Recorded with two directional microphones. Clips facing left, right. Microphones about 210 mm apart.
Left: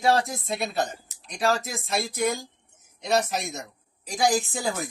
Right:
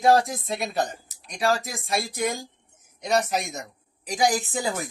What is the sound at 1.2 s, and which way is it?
Speech, 15° right (ahead or behind).